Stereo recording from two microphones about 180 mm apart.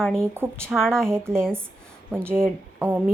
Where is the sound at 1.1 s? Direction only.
15° right (ahead or behind).